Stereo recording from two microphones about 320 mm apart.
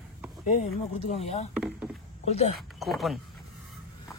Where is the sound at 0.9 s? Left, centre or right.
Left.